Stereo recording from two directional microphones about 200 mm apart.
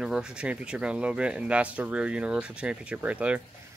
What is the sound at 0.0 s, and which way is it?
Speech, 5° right (ahead or behind).